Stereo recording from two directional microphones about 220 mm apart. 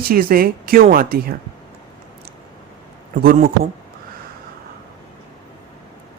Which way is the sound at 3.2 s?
40° right (ahead or behind).